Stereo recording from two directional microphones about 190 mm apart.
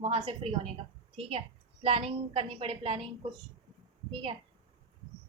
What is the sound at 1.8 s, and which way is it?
A woman's voice, 30° right (ahead or behind).